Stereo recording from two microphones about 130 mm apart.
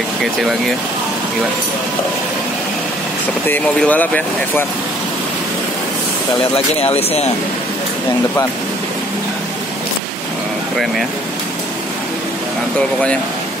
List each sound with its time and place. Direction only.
3.4 s speech: 10° left (ahead or behind)
6.8 s speech: 50° left (ahead or behind)